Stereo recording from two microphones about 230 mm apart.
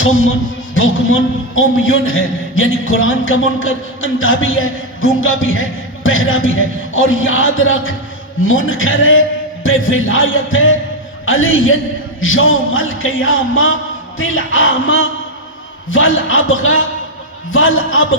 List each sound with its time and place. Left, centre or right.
0.0 s speech: left